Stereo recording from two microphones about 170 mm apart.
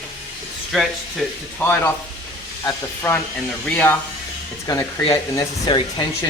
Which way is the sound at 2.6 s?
15° left (ahead or behind).